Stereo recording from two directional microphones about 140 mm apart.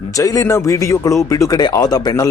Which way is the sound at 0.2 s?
25° left (ahead or behind).